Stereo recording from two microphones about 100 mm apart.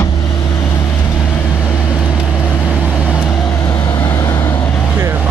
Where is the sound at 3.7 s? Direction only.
35° left (ahead or behind).